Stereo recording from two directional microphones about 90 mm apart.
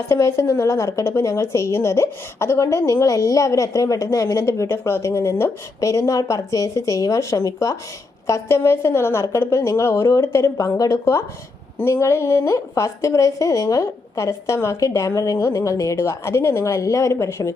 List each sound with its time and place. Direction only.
0.1 s a woman's voice: 30° left (ahead or behind)